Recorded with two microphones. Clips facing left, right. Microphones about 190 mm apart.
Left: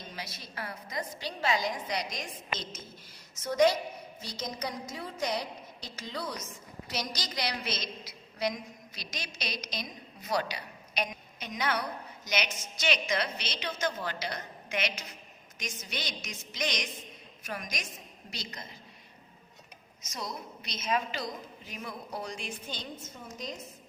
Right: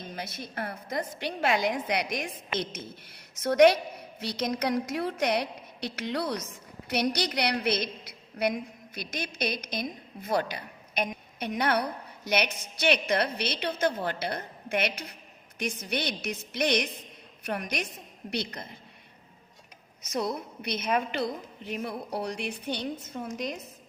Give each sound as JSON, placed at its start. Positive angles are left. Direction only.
{"t": 0.2, "sound": "a woman's voice", "side_deg": -55}
{"t": 20.0, "sound": "a woman's voice", "side_deg": -60}